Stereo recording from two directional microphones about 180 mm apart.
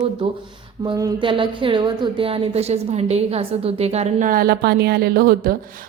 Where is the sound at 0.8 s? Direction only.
25° right (ahead or behind).